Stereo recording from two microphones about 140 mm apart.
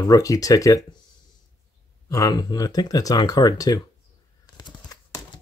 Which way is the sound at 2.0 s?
25° left (ahead or behind).